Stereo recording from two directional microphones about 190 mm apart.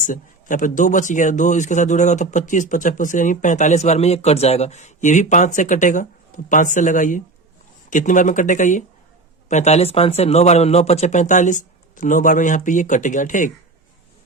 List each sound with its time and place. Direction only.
0.0 s speech: 45° left (ahead or behind)